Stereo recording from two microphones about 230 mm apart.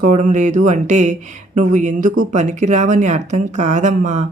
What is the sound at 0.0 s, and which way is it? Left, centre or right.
Speech, right.